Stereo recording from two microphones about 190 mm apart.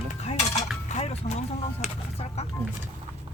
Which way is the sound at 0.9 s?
35° left (ahead or behind).